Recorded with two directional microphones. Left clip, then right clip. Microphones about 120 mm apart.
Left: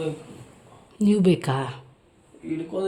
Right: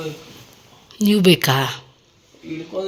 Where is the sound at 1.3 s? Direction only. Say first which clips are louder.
Right 8 dB; 15° right (ahead or behind).